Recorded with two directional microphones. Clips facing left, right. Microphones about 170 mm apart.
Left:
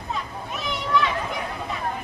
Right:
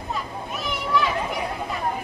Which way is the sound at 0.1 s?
Centre (ahead or behind).